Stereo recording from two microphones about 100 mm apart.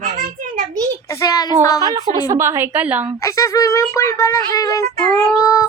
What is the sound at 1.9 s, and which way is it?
Speech, 50° right (ahead or behind).